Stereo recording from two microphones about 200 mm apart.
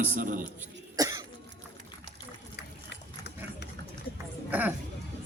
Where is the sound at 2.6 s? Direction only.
55° left (ahead or behind).